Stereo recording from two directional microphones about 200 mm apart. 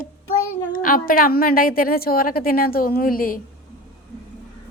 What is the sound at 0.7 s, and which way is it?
A woman's voice, 45° left (ahead or behind).